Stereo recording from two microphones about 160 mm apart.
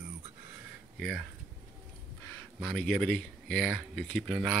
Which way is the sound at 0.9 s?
Centre (ahead or behind).